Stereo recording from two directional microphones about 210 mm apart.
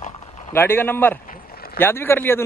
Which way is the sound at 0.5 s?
10° left (ahead or behind).